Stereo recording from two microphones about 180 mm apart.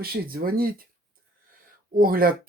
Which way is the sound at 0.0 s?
60° right (ahead or behind).